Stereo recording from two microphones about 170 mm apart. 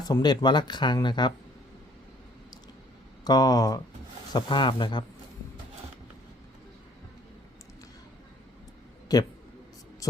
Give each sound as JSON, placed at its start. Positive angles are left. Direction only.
{"t": 0.0, "sound": "speech", "side_deg": 25}
{"t": 3.2, "sound": "speech", "side_deg": 20}
{"t": 9.1, "sound": "speech", "side_deg": 20}
{"t": 10.0, "sound": "heart sounds", "side_deg": 20}